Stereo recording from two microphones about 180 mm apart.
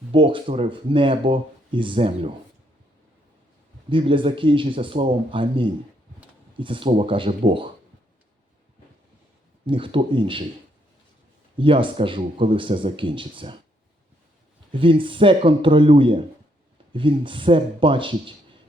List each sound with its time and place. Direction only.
0.1 s speech: 30° right (ahead or behind)
3.8 s speech: 30° right (ahead or behind)
9.6 s speech: 30° right (ahead or behind)
11.5 s speech: 30° right (ahead or behind)
14.7 s speech: 30° right (ahead or behind)